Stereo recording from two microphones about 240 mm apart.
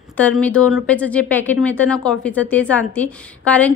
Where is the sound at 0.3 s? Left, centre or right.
Centre.